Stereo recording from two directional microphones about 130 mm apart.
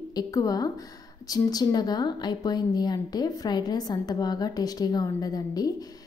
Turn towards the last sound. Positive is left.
turn(degrees=30)  # may be behind; listen again after turning